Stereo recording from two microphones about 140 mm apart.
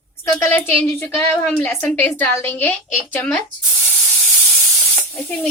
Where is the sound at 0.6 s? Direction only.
10° left (ahead or behind).